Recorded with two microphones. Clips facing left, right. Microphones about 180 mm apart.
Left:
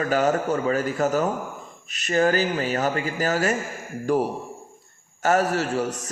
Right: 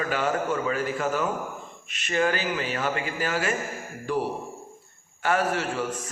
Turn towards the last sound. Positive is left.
turn(degrees=40)  # may be behind; listen again after turning